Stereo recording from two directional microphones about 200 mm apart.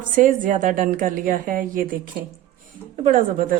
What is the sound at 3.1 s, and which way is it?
Speech, 40° right (ahead or behind).